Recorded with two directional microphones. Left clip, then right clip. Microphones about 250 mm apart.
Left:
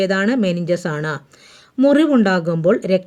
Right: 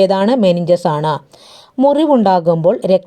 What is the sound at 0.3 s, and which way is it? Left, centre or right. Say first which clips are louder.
Speech: right 7 dB; centre.